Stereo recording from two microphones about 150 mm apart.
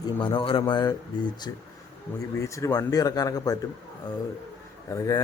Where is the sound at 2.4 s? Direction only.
20° left (ahead or behind).